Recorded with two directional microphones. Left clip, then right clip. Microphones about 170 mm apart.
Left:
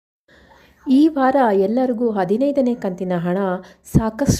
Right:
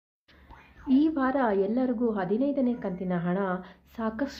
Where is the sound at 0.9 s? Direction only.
50° left (ahead or behind).